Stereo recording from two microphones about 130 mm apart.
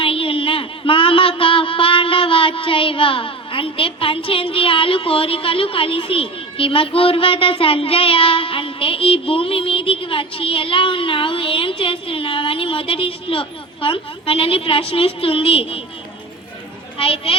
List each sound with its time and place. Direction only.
0.0 s speech: 45° left (ahead or behind)
17.0 s speech: 45° left (ahead or behind)